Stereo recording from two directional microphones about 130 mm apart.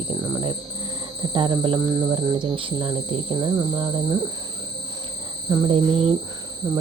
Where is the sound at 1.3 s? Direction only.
40° right (ahead or behind).